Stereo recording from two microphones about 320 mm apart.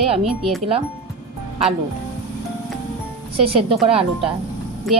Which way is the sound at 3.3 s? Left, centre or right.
Centre.